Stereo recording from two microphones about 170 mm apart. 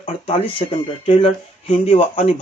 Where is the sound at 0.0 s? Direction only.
35° left (ahead or behind).